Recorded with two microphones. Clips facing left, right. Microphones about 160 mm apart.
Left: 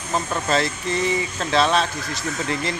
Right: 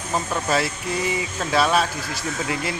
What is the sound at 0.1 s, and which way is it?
Speech, 5° right (ahead or behind).